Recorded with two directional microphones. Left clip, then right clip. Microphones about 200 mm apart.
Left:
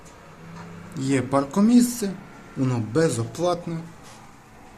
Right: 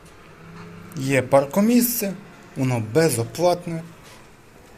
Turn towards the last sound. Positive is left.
turn(degrees=-10)  # may be behind; listen again after turning